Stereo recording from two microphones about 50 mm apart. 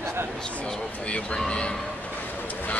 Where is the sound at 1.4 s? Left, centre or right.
Centre.